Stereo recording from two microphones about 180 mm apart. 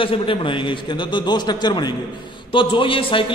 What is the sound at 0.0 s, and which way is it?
A man's voice, 30° left (ahead or behind).